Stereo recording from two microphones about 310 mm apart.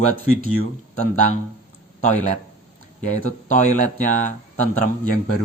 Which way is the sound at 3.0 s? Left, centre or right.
Right.